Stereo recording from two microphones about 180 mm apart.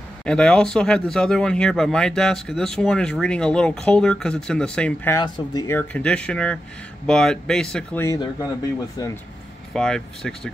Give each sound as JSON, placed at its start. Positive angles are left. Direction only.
{"t": 0.2, "sound": "speech", "side_deg": 5}
{"t": 5.1, "sound": "speech", "side_deg": 20}
{"t": 5.8, "sound": "speech", "side_deg": 5}
{"t": 9.8, "sound": "speech", "side_deg": 5}